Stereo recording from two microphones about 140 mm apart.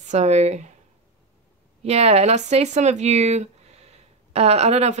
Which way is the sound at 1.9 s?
50° right (ahead or behind).